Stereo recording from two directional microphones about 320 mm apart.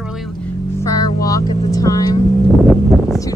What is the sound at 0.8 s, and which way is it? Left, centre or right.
Speech, centre.